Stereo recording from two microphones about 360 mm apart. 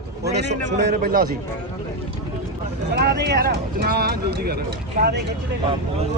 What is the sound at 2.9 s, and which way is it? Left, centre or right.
Speech, right.